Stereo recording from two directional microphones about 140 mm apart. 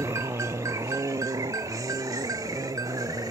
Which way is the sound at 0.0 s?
20° right (ahead or behind).